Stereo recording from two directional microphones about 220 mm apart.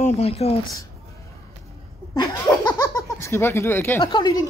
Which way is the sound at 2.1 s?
15° left (ahead or behind).